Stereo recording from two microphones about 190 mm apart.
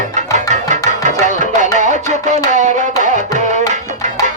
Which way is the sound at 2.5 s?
40° right (ahead or behind).